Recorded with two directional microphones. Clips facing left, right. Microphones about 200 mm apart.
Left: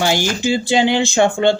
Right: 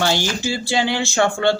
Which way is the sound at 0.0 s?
15° left (ahead or behind).